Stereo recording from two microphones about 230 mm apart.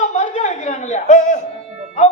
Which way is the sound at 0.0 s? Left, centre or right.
Left.